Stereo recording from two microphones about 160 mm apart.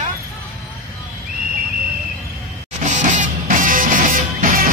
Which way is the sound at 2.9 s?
50° right (ahead or behind).